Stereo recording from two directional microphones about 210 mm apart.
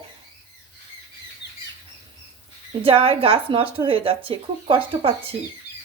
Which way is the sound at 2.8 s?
25° right (ahead or behind).